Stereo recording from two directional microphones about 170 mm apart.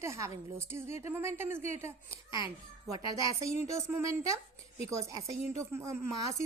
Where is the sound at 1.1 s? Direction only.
15° right (ahead or behind).